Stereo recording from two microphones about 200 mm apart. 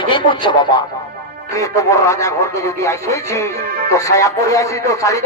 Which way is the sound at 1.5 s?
15° left (ahead or behind).